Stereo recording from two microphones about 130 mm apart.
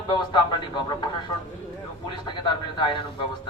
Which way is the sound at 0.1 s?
35° left (ahead or behind).